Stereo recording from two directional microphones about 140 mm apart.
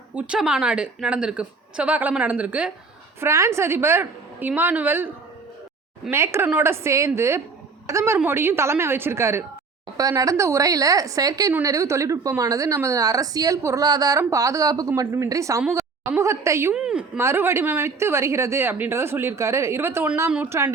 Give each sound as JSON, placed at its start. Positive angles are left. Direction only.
{"t": 0.1, "sound": "a woman's voice", "side_deg": -10}
{"t": 3.2, "sound": "a woman's voice", "side_deg": -20}
{"t": 16.7, "sound": "a woman's voice", "side_deg": -5}
{"t": 17.2, "sound": "a woman's voice", "side_deg": -15}